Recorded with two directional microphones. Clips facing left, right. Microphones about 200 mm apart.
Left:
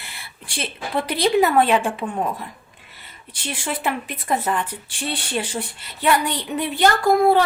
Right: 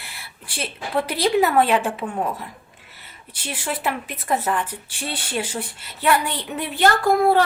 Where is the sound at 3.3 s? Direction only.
5° right (ahead or behind).